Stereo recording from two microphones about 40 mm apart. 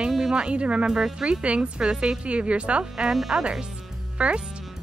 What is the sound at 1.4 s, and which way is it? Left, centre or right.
Speech, right.